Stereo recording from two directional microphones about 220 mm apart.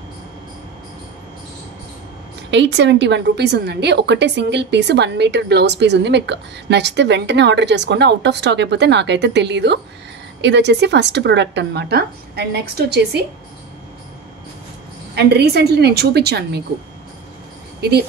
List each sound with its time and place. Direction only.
2.5 s a woman's voice: 55° right (ahead or behind)
15.1 s a woman's voice: 50° right (ahead or behind)
17.7 s speech: 45° right (ahead or behind)